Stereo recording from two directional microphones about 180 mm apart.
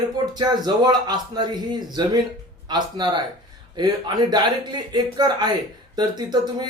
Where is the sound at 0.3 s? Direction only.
25° right (ahead or behind).